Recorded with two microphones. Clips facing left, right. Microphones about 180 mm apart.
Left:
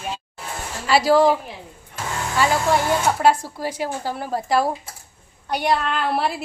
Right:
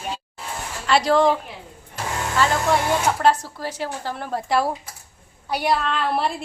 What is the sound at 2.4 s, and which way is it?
A woman's voice, 5° left (ahead or behind).